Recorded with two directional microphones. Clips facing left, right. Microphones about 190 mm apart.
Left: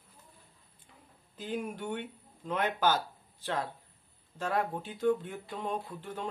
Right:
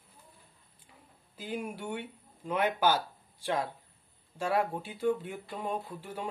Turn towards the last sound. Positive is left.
turn(degrees=-10)  # may be behind; listen again after turning